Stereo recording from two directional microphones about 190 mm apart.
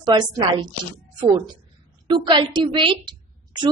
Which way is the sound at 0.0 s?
25° right (ahead or behind).